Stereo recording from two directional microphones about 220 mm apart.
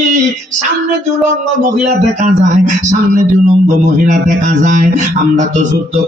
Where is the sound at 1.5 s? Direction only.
35° right (ahead or behind).